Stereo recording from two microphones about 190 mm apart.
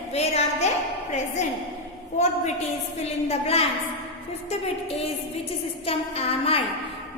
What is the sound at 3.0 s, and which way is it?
Speech, 30° left (ahead or behind).